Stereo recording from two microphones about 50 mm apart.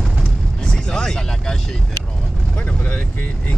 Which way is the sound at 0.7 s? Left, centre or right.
Centre.